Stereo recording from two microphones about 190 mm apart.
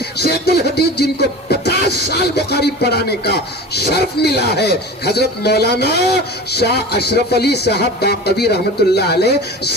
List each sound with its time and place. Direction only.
0.2 s speech: 60° left (ahead or behind)